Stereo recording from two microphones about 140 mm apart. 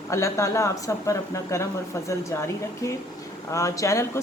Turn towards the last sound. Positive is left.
turn(degrees=20)  # may be behind; listen again after turning